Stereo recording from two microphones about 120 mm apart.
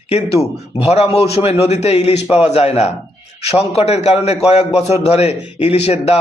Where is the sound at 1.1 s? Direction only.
55° left (ahead or behind).